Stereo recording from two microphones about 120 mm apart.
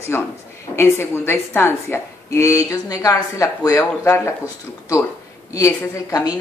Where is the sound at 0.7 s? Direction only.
20° left (ahead or behind).